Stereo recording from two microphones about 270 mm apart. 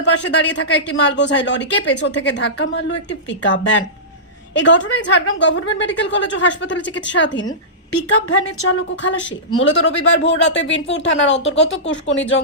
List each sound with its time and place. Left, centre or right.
0.3 s a woman's voice: left